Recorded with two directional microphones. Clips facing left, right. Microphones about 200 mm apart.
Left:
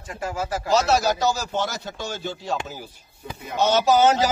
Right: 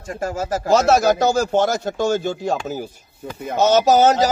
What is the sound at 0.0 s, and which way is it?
A man's voice, 45° right (ahead or behind).